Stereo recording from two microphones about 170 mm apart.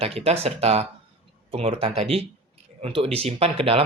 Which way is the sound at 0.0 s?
35° right (ahead or behind).